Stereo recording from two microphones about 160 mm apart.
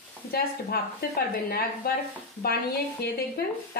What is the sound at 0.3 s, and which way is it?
Speech, 70° left (ahead or behind).